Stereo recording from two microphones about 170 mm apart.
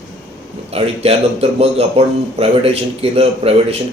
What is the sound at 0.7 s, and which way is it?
Speech, 35° right (ahead or behind).